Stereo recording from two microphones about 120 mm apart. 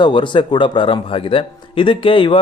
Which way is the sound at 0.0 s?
40° left (ahead or behind).